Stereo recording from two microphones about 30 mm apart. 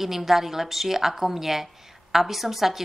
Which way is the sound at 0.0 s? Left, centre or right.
Centre.